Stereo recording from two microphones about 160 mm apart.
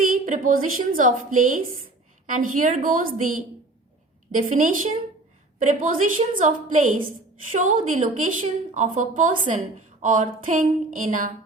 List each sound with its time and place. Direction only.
0.3 s a woman's voice: 55° right (ahead or behind)